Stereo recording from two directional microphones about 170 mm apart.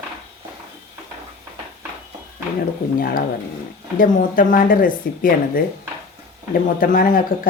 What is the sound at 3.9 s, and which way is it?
Speech, 55° left (ahead or behind).